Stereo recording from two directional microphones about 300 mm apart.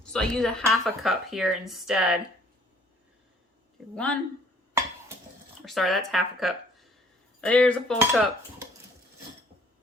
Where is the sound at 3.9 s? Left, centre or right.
Centre.